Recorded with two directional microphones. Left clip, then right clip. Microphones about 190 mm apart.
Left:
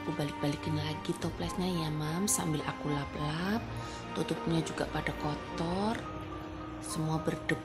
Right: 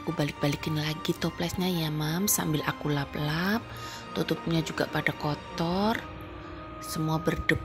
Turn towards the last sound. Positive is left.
turn(degrees=-15)  # may be behind; listen again after turning